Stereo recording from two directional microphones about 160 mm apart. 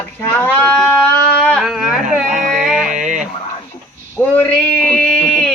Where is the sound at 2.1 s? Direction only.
5° right (ahead or behind).